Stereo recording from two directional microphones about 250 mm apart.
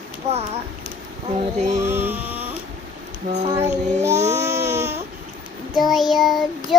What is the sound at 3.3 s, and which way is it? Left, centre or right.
Female singing, right.